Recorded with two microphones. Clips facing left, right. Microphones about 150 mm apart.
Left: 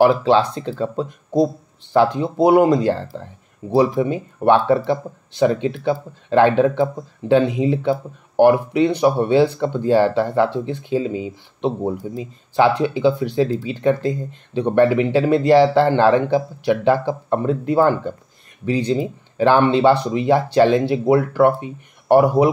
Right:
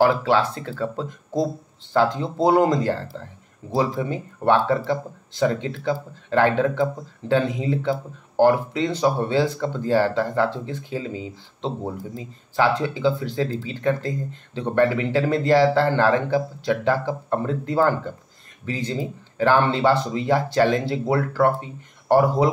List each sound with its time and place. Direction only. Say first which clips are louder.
0.0 s speech: left 4 dB; 20° left (ahead or behind)